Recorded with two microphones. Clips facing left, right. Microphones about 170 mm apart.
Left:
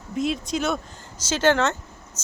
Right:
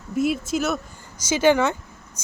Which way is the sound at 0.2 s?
5° right (ahead or behind).